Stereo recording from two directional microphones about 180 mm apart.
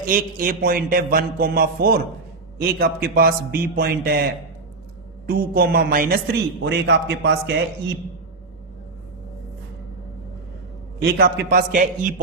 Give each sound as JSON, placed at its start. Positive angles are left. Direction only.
{"t": 0.0, "sound": "a man's voice", "side_deg": -50}
{"t": 11.0, "sound": "a man's voice", "side_deg": -60}